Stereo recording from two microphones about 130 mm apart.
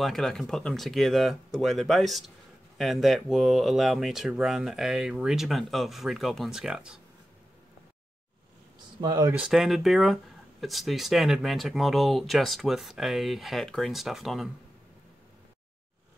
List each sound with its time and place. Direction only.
0.0 s speech: 5° left (ahead or behind)
9.0 s speech: 30° right (ahead or behind)
9.4 s speech: centre (ahead or behind)